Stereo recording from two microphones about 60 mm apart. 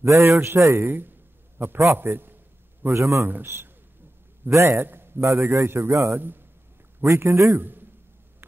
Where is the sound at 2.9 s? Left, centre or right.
Right.